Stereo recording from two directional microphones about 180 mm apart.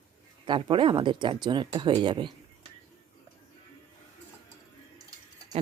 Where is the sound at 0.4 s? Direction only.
25° right (ahead or behind).